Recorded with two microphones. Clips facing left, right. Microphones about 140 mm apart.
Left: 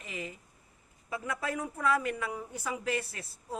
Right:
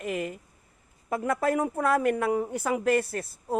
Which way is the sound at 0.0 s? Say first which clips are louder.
Right 10 dB; 55° right (ahead or behind).